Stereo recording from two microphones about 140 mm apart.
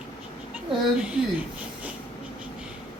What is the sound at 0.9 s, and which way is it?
Speech, 5° right (ahead or behind).